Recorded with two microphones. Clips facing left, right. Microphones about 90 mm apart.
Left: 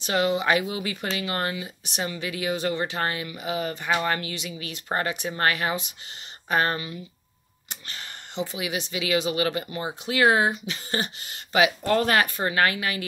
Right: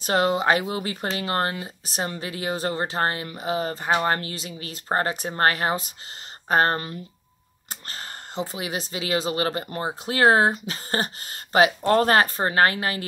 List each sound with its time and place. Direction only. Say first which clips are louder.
0.0 s speech: right 2 dB; 40° right (ahead or behind)